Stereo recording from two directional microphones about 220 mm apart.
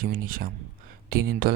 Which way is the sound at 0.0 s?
40° right (ahead or behind).